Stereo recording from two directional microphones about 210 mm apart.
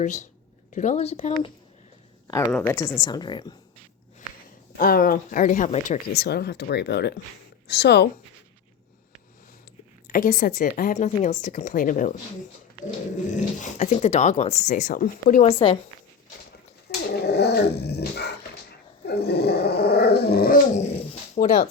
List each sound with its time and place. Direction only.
0.0 s speech: 35° left (ahead or behind)
2.2 s a woman's voice: 15° left (ahead or behind)
4.8 s speech: 45° left (ahead or behind)
6.1 s dog: 50° left (ahead or behind)
10.1 s speech: 40° left (ahead or behind)
13.3 s speech: 35° left (ahead or behind)
16.9 s dog: 50° left (ahead or behind)
21.3 s speech: 35° left (ahead or behind)